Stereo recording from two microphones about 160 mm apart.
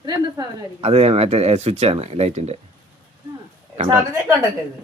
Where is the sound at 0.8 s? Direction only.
40° right (ahead or behind).